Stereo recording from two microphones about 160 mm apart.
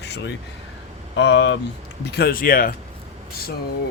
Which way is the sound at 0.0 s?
90° left.